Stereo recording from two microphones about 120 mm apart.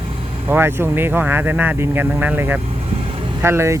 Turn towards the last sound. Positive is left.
turn(degrees=-20)  # may be behind; listen again after turning